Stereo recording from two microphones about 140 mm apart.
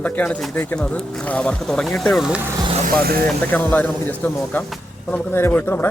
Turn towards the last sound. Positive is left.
turn(degrees=15)  # may be behind; listen again after turning